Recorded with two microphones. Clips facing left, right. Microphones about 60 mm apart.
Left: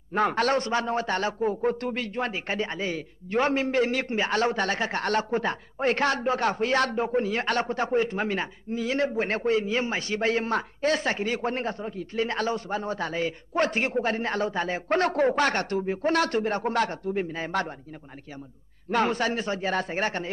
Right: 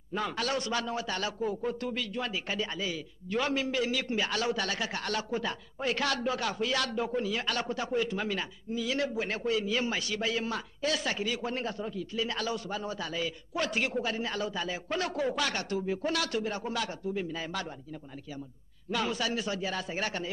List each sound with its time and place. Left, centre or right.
0.1 s a man's voice: left
18.9 s a man's voice: left